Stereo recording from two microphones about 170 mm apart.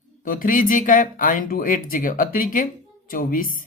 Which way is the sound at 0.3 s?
55° left (ahead or behind).